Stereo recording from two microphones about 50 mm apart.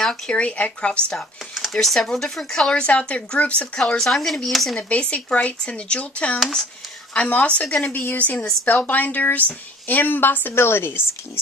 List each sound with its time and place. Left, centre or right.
0.3 s speech: left
1.5 s speech: centre
2.7 s speech: left
4.0 s speech: centre
4.8 s speech: left
7.6 s speech: centre
8.1 s speech: left
10.5 s speech: left